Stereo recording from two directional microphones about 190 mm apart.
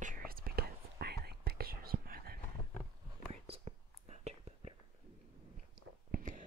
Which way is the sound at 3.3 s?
35° right (ahead or behind).